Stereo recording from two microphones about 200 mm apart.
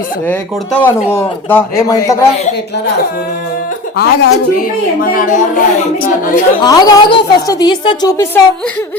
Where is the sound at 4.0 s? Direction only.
55° left (ahead or behind).